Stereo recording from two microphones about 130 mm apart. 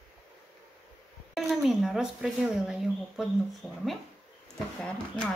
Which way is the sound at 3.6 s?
15° left (ahead or behind).